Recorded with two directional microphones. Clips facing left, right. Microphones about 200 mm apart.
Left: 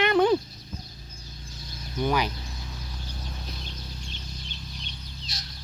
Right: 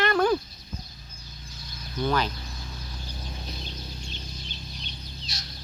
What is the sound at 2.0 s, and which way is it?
Speech, 15° left (ahead or behind).